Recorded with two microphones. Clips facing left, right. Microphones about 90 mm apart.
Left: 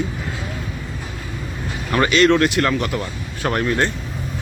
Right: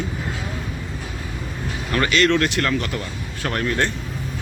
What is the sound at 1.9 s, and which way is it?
Speech, 20° left (ahead or behind).